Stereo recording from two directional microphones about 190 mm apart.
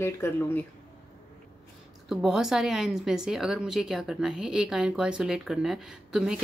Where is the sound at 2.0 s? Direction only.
5° right (ahead or behind).